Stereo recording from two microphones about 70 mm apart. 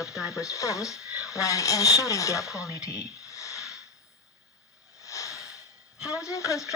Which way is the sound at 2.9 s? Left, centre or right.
Left.